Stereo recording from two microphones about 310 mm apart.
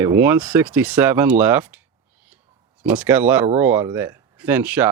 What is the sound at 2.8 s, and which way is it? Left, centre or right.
Speech, centre.